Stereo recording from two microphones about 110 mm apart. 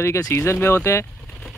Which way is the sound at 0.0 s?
25° left (ahead or behind).